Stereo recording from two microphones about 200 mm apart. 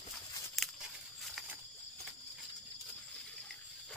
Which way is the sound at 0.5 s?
Centre (ahead or behind).